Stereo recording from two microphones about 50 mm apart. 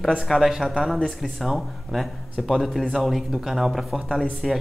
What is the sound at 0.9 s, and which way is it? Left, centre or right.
Speech, right.